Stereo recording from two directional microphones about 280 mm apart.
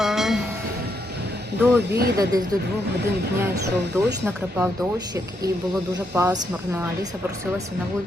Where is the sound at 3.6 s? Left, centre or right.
Centre.